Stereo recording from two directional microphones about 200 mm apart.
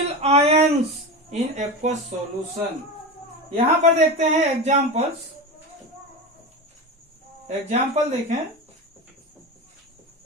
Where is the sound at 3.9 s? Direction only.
35° right (ahead or behind).